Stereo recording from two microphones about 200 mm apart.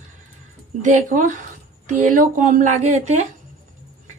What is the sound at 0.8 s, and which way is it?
A woman's voice, 40° right (ahead or behind).